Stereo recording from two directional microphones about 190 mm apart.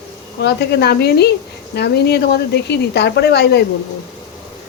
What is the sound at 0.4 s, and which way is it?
Speech, 60° left (ahead or behind).